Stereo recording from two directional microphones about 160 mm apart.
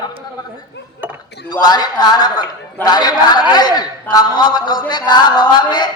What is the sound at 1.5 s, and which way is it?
A man's voice, 25° left (ahead or behind).